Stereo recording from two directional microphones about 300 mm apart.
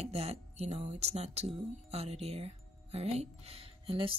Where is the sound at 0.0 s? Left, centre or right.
Right.